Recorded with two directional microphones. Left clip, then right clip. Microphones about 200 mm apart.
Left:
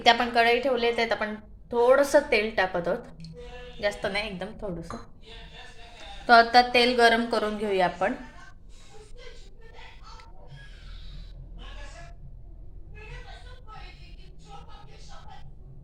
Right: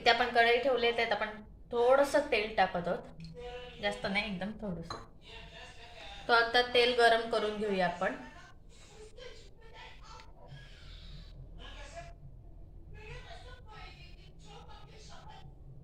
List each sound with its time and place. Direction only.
0.0 s a woman's voice: 30° left (ahead or behind)
6.2 s a woman's voice: 35° left (ahead or behind)